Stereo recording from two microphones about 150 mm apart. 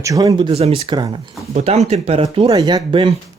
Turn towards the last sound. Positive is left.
turn(degrees=-30)  # may be behind; listen again after turning